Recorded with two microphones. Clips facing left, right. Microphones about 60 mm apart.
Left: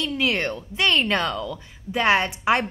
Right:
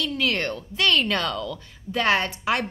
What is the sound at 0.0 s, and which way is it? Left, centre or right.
A woman's voice, centre.